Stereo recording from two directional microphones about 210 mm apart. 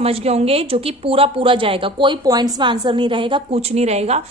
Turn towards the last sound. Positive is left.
turn(degrees=-30)  # may be behind; listen again after turning